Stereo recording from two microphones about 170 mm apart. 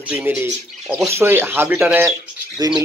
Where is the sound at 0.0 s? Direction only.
10° right (ahead or behind).